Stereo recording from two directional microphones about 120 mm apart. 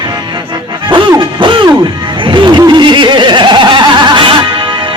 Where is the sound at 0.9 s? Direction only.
40° right (ahead or behind).